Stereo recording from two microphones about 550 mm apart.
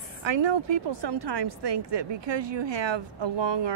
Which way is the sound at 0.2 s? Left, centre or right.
Right.